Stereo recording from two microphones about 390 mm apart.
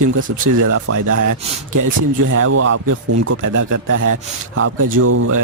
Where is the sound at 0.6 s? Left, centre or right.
Right.